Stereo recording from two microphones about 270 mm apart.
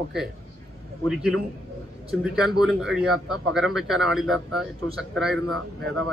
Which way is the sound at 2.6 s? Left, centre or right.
Centre.